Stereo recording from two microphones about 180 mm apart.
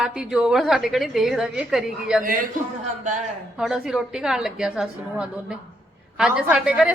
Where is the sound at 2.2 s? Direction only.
50° right (ahead or behind).